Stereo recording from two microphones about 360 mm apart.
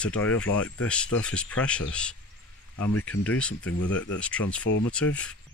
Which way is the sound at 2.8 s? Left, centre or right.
Left.